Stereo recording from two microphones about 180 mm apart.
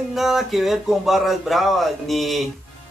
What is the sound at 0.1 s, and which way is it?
A man's voice, centre (ahead or behind).